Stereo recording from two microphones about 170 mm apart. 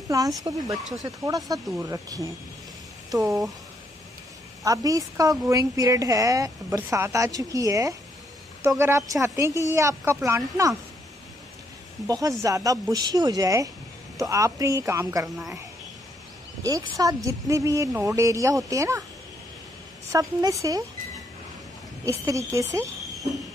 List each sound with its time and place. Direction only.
0.4 s speech: 20° right (ahead or behind)
4.6 s speech: 20° right (ahead or behind)
12.1 s speech: 20° right (ahead or behind)
15.2 s speech: centre (ahead or behind)
16.6 s speech: 20° right (ahead or behind)
20.1 s speech: 20° right (ahead or behind)
22.2 s speech: 20° right (ahead or behind)